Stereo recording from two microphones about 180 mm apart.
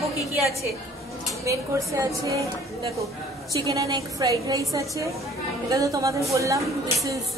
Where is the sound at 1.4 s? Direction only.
15° right (ahead or behind).